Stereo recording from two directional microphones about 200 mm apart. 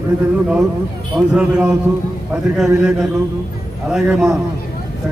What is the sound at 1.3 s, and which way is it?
A man's voice, 5° right (ahead or behind).